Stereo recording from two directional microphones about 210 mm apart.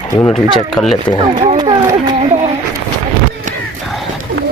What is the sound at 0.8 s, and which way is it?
Speech, centre (ahead or behind).